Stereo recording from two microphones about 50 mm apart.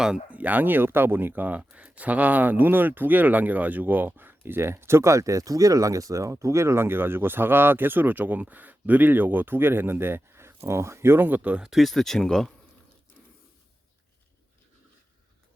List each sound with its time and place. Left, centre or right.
0.3 s speech: right
11.3 s speech: right
11.6 s speech: centre